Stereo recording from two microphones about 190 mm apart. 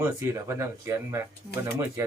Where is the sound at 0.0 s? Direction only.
15° right (ahead or behind).